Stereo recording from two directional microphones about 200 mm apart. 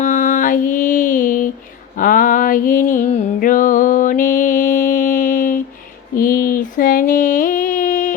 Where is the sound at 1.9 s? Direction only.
45° left (ahead or behind).